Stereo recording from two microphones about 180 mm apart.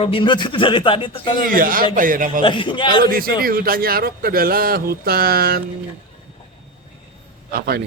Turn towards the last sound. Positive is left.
turn(degrees=-55)  # may be behind; listen again after turning